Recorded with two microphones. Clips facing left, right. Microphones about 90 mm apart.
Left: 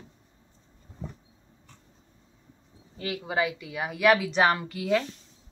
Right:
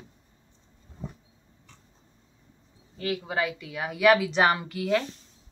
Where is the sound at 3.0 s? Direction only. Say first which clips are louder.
Even; 5° left (ahead or behind).